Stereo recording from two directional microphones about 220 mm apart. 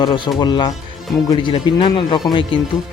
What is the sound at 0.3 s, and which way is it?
Speech, 20° left (ahead or behind).